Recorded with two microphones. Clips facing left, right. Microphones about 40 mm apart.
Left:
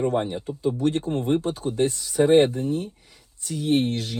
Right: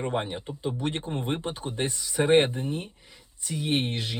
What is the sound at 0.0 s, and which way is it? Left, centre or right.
Speech, right.